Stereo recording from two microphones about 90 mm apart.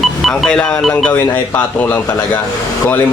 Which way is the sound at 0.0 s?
5° left (ahead or behind).